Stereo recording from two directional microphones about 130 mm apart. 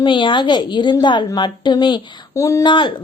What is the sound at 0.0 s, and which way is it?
A woman's voice, 40° left (ahead or behind).